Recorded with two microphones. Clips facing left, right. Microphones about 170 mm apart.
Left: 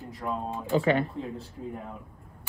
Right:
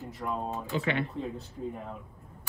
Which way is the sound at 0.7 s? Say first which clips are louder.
Left 7 dB; 40° left (ahead or behind).